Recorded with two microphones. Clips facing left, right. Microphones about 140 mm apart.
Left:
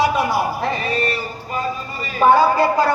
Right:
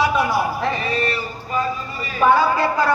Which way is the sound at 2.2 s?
35° left (ahead or behind).